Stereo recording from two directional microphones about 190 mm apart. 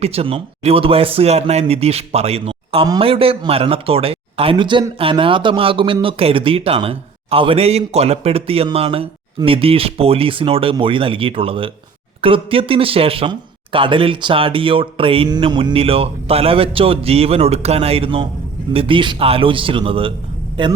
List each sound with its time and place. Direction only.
0.0 s speech: 30° right (ahead or behind)